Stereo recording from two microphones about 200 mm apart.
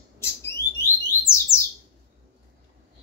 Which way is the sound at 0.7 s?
10° left (ahead or behind).